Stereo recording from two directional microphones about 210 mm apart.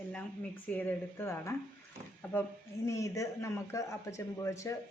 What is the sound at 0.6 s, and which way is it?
Speech, 10° left (ahead or behind).